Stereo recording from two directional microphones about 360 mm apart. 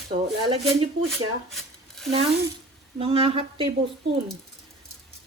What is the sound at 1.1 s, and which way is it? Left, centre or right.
Speech, centre.